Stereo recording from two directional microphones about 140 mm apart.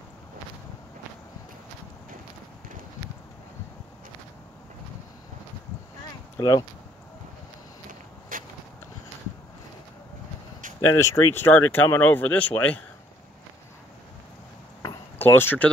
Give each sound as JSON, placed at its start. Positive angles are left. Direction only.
{"t": 6.3, "sound": "speech", "side_deg": 25}
{"t": 8.3, "sound": "a sound", "side_deg": -75}
{"t": 10.9, "sound": "speech", "side_deg": 20}
{"t": 15.1, "sound": "speech", "side_deg": 15}